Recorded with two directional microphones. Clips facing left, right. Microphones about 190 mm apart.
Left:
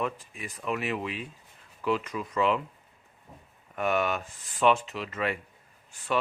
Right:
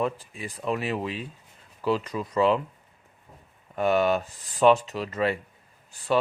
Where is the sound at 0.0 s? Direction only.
30° right (ahead or behind).